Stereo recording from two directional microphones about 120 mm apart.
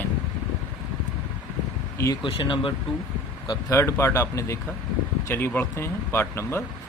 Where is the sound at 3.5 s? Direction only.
25° left (ahead or behind).